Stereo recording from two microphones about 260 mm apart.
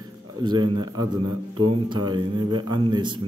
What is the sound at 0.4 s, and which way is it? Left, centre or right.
A man's voice, centre.